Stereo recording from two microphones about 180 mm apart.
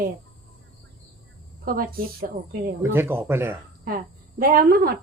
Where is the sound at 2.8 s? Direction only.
10° right (ahead or behind).